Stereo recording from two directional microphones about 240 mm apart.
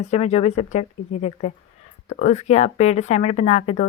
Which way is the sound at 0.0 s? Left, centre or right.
Left.